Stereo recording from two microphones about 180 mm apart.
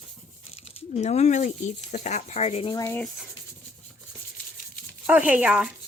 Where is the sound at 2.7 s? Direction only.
15° left (ahead or behind).